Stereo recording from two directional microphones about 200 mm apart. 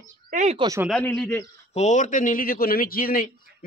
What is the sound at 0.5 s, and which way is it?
Speech, 20° right (ahead or behind).